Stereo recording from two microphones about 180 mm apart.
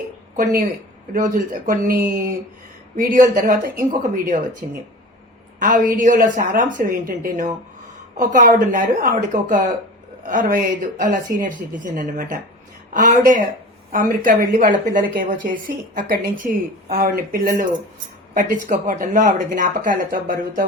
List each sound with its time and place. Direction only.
0.3 s speech: 50° right (ahead or behind)